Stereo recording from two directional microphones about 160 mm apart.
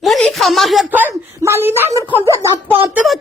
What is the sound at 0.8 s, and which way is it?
A woman's voice, 10° right (ahead or behind).